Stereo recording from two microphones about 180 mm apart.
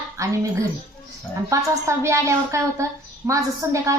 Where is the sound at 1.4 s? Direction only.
15° right (ahead or behind).